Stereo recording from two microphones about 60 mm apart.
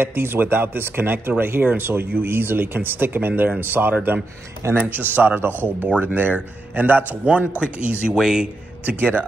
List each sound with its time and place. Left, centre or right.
0.0 s a man's voice: right
8.1 s speech: centre
8.8 s a man's voice: right